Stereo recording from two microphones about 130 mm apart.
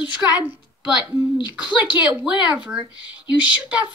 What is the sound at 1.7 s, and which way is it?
Speech, 35° left (ahead or behind).